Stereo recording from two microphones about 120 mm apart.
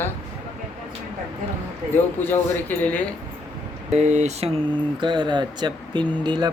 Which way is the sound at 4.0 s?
75° right (ahead or behind).